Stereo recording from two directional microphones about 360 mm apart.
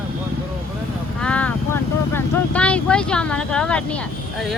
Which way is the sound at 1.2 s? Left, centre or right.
Centre.